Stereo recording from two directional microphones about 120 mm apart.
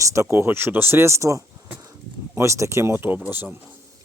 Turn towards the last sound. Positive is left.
turn(degrees=-15)  # may be behind; listen again after turning